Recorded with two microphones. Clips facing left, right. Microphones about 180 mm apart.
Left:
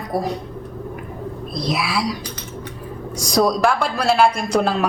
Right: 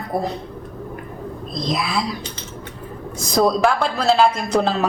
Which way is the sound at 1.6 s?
5° left (ahead or behind).